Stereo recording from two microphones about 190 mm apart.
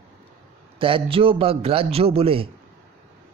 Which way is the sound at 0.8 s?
30° right (ahead or behind).